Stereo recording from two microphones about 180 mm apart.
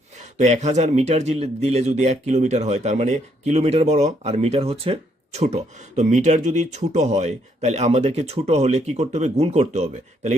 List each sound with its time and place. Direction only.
0.3 s speech: 40° right (ahead or behind)